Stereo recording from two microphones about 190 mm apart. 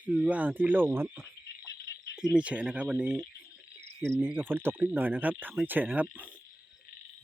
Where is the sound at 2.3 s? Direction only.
5° right (ahead or behind).